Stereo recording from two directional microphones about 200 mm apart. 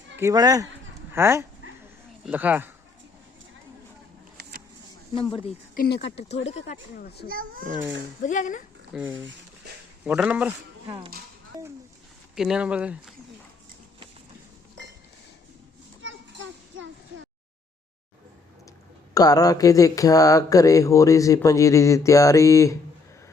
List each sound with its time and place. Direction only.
0.2 s speech: 15° right (ahead or behind)
5.7 s a child's voice: 50° left (ahead or behind)
7.3 s a child's voice: 45° right (ahead or behind)
8.2 s speech: 40° left (ahead or behind)
8.9 s speech: 5° right (ahead or behind)
10.8 s speech: 25° right (ahead or behind)
11.5 s a sound: 15° right (ahead or behind)
12.4 s speech: 5° right (ahead or behind)
16.0 s children playing: 75° right (ahead or behind)
19.1 s speech: 20° left (ahead or behind)